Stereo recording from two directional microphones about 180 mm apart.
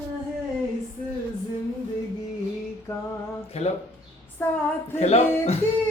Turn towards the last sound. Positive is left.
turn(degrees=35)  # may be behind; listen again after turning